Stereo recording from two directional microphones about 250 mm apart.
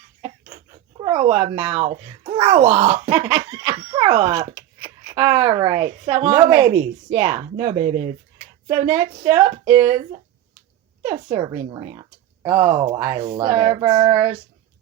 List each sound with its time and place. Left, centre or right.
0.2 s speech: centre
11.0 s speech: centre